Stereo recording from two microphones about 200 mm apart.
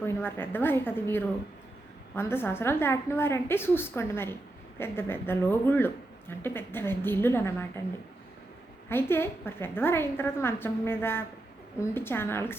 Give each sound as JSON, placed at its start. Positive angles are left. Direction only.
{"t": 0.0, "sound": "speech", "side_deg": 10}
{"t": 8.9, "sound": "speech", "side_deg": 10}